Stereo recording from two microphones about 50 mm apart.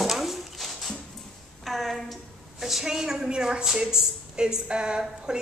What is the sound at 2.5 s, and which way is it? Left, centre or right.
A woman's voice, centre.